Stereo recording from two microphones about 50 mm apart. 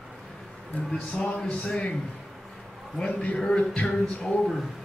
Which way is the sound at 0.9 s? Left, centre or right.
Centre.